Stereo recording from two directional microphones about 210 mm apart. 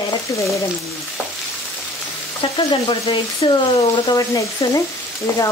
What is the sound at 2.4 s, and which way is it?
Speech, 25° left (ahead or behind).